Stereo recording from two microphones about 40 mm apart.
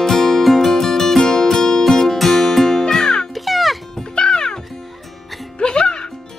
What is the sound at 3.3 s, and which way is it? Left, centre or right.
Music, centre.